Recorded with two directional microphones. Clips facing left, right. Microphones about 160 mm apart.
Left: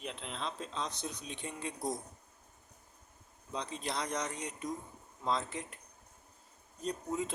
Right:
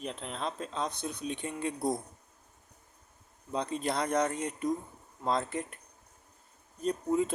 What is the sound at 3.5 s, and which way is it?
Speech, 55° right (ahead or behind).